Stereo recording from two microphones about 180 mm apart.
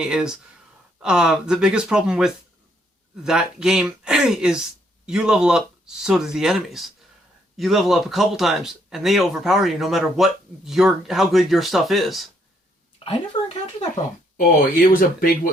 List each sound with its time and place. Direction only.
0.0 s speech: 5° right (ahead or behind)
13.1 s speech: 35° left (ahead or behind)
14.3 s speech: 50° left (ahead or behind)